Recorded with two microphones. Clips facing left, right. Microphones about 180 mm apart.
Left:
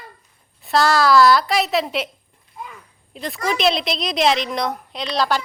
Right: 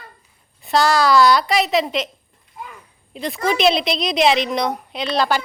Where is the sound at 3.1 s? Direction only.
Centre (ahead or behind).